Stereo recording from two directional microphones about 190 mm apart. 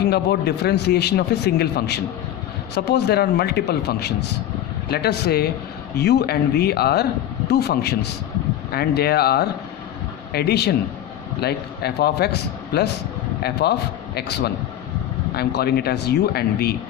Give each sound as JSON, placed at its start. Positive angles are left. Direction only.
{"t": 0.0, "sound": "a man's voice", "side_deg": 60}